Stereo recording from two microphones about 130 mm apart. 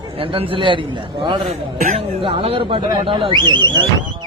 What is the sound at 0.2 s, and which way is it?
Speech, 45° right (ahead or behind).